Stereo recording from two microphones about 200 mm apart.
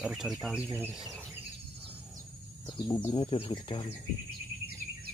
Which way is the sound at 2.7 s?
20° left (ahead or behind).